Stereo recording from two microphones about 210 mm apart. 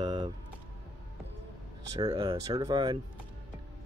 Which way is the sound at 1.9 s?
20° right (ahead or behind).